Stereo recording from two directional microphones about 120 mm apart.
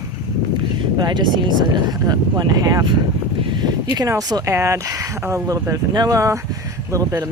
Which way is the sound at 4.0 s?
30° right (ahead or behind).